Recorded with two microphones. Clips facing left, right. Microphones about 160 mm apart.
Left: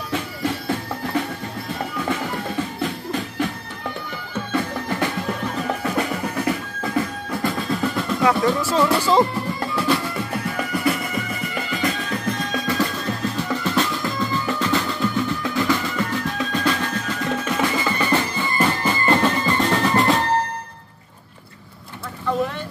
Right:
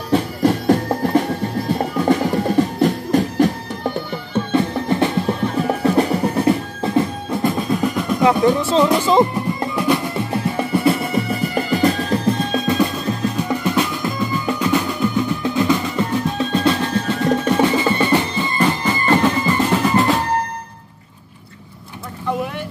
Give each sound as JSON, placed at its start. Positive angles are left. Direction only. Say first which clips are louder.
{"t": 0.1, "sound": "music", "louder": "right 9 dB", "side_deg": -40}
{"t": 19.8, "sound": "drum", "louder": "right 2 dB", "side_deg": 0}